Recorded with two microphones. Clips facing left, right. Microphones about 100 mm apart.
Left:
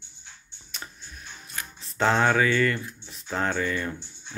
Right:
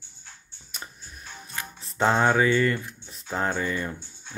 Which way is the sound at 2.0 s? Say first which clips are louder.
Right 1 dB; 15° right (ahead or behind).